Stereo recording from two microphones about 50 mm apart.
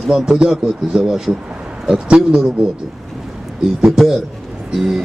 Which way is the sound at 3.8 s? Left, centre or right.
Centre.